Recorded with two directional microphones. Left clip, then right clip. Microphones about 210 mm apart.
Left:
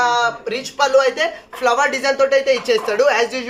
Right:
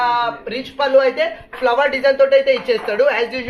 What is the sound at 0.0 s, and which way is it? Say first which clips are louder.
Speech: left 1 dB; 45° left (ahead or behind).